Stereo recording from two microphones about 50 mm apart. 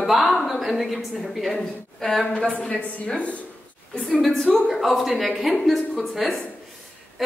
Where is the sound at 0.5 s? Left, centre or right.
Centre.